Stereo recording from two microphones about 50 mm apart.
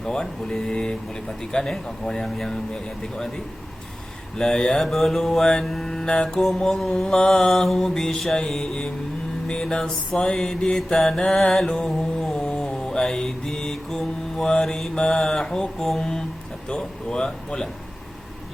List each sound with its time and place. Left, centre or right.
0.0 s speech: centre
4.4 s speech: centre
11.4 s mantra: centre
12.5 s mantra: centre
14.6 s speech: centre